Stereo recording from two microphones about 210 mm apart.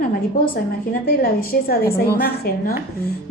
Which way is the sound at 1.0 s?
45° left (ahead or behind).